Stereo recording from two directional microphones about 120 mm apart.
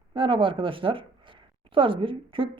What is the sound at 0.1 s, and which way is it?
A woman's voice, 45° right (ahead or behind).